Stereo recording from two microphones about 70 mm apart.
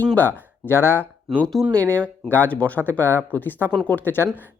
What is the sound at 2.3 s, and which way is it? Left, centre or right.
Speech, left.